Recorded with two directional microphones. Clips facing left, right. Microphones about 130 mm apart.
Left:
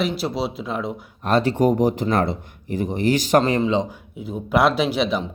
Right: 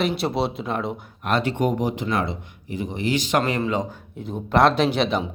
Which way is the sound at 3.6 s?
20° left (ahead or behind).